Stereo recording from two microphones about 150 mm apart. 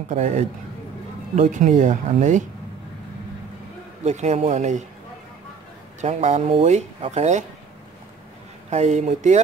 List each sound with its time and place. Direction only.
0.1 s speech: 50° right (ahead or behind)
4.0 s speech: 50° right (ahead or behind)
5.9 s speech: 50° right (ahead or behind)
8.6 s speech: 50° right (ahead or behind)